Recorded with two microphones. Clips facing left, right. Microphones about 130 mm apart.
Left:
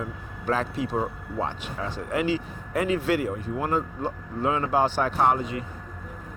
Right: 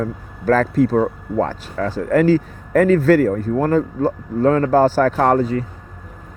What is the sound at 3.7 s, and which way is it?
Speech, 90° right.